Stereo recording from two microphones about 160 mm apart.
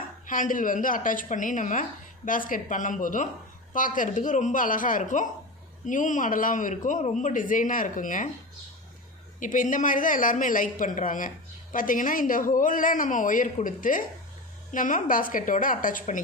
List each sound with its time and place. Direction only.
0.3 s a woman's voice: 55° left (ahead or behind)
9.4 s a woman's voice: 55° left (ahead or behind)